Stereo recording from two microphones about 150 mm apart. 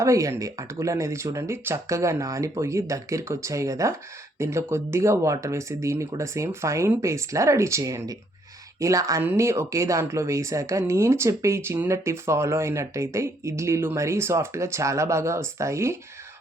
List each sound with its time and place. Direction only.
0.0 s speech: 20° right (ahead or behind)